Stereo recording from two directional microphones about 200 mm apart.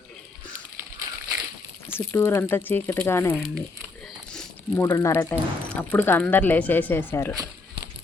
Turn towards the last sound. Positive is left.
turn(degrees=10)  # may be behind; listen again after turning